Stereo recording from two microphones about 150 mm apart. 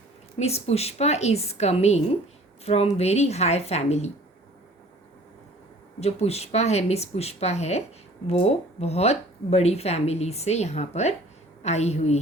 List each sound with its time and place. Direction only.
0.3 s speech: 45° left (ahead or behind)
6.0 s speech: 45° left (ahead or behind)